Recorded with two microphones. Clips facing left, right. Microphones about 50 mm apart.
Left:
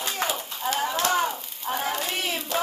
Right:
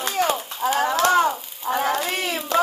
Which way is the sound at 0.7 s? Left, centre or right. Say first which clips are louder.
Right 6 dB; right.